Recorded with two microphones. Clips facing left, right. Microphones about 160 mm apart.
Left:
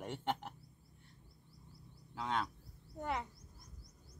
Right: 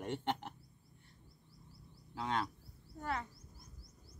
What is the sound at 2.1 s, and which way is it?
Speech, centre (ahead or behind).